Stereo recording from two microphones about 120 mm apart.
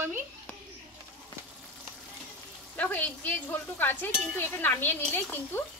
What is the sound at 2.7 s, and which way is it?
Speech, 15° left (ahead or behind).